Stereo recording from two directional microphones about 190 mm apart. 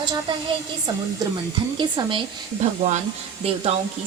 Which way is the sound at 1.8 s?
25° right (ahead or behind).